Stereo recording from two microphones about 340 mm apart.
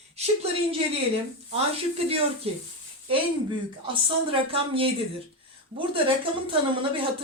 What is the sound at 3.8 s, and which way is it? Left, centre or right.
Speech, centre.